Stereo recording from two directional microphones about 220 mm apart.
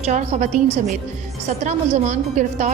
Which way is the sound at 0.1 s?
35° right (ahead or behind).